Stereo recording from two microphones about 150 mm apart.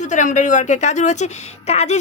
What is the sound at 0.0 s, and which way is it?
A woman's voice, 55° left (ahead or behind).